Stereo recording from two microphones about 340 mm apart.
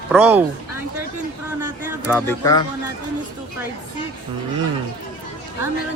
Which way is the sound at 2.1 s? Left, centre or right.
Centre.